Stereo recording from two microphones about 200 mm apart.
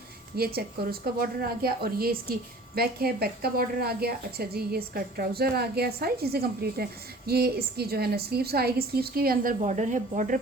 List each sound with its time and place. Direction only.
0.3 s a woman's voice: 50° right (ahead or behind)